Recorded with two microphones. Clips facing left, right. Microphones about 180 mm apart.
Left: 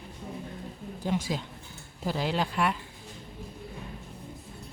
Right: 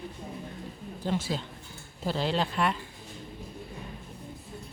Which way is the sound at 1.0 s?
15° left (ahead or behind).